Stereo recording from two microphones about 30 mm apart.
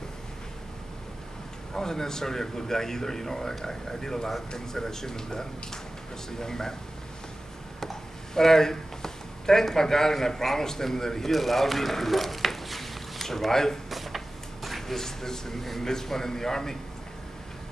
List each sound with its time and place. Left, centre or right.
1.7 s speech: centre
7.8 s speech: centre
11.3 s a sound: centre
13.5 s speech: centre
13.8 s a sound: centre
15.0 s speech: centre